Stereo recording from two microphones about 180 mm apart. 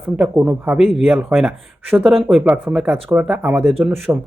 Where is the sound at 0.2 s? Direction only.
5° right (ahead or behind).